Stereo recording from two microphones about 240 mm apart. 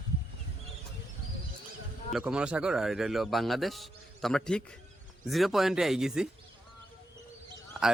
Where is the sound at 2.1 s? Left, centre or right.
Centre.